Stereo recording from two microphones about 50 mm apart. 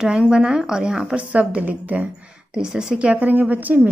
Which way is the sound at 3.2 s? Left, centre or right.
Right.